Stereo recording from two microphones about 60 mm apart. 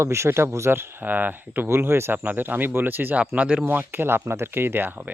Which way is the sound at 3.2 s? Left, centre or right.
Right.